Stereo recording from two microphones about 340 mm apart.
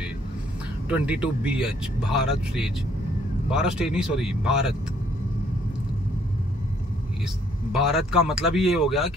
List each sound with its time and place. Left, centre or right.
0.8 s speech: centre
7.7 s speech: centre